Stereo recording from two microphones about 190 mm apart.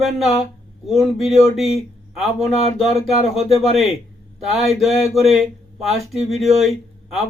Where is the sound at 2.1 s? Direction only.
Centre (ahead or behind).